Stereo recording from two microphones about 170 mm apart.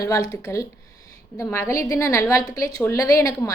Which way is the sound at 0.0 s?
20° left (ahead or behind).